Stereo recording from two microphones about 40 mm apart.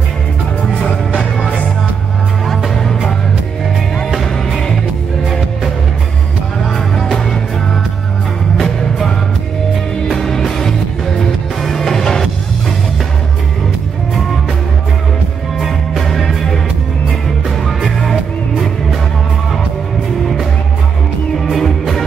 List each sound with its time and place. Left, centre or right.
0.8 s music: centre
6.7 s music: centre
10.0 s music: centre
15.6 s music: centre
17.6 s music: centre
21.5 s music: centre